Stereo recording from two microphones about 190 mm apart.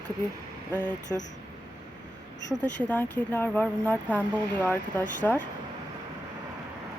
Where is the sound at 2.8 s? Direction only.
10° left (ahead or behind).